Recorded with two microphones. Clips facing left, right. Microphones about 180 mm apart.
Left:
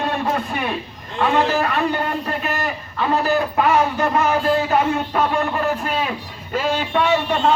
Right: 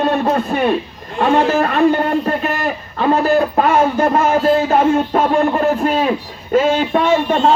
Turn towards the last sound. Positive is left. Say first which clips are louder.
# right 4 dB
turn(degrees=-40)  # may be behind; listen again after turning